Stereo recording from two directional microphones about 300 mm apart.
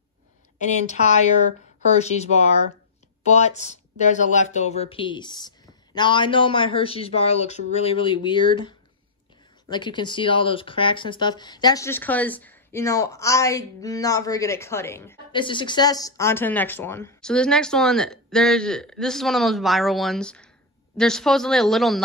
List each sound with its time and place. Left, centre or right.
2.0 s speech: left; by 22.0 s centre